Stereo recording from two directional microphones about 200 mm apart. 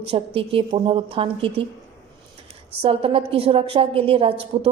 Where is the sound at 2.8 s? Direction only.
30° right (ahead or behind).